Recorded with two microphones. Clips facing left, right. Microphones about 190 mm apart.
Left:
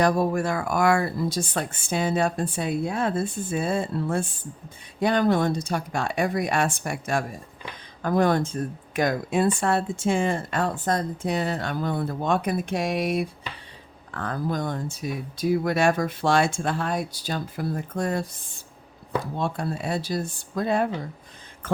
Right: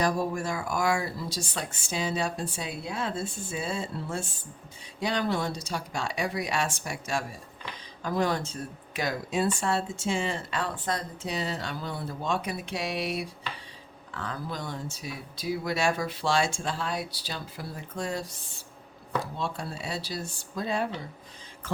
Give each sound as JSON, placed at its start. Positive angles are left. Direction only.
{"t": 0.0, "sound": "speech", "side_deg": 60}